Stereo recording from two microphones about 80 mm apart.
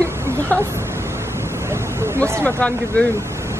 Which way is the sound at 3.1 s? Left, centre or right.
Right.